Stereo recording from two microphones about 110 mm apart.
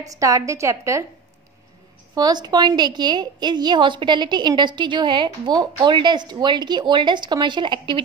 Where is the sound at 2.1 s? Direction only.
40° right (ahead or behind).